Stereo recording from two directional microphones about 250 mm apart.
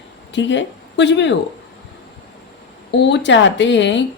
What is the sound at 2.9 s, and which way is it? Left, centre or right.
A woman's voice, left.